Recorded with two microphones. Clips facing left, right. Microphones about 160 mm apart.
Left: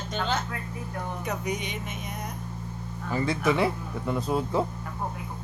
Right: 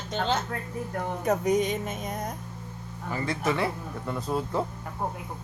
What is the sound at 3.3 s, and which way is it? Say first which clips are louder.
Speech: left 3 dB; 15° left (ahead or behind).